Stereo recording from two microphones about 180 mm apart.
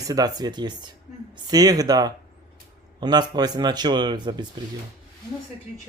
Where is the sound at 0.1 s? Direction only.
20° right (ahead or behind).